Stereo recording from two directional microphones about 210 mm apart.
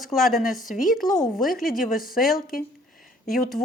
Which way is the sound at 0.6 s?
40° left (ahead or behind).